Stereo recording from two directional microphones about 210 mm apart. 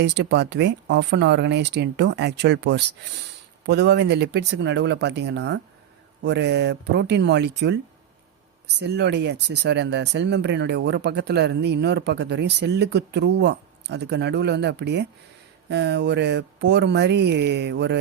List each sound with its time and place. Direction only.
0.0 s speech: 55° right (ahead or behind)
8.8 s speech: 55° right (ahead or behind)